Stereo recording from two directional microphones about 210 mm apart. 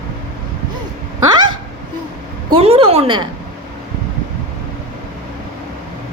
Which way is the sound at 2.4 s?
25° right (ahead or behind).